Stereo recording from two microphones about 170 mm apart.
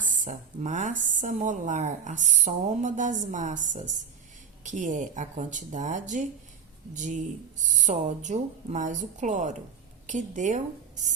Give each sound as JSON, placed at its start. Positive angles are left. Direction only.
{"t": 0.0, "sound": "a woman's voice", "side_deg": -50}